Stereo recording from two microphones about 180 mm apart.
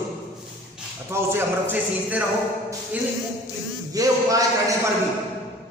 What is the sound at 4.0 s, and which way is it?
Speech, 20° right (ahead or behind).